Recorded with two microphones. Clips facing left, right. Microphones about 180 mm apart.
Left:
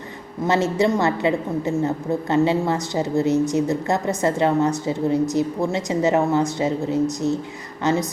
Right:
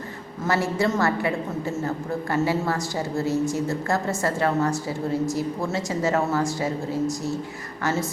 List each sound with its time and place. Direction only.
0.4 s a woman's voice: 20° left (ahead or behind)